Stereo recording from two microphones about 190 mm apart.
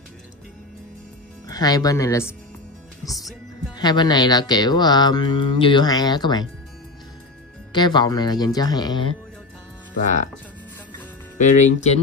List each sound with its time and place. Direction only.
1.5 s speech: 20° left (ahead or behind)
3.7 s speech: 20° left (ahead or behind)
7.7 s speech: 25° left (ahead or behind)
11.3 s speech: 40° left (ahead or behind)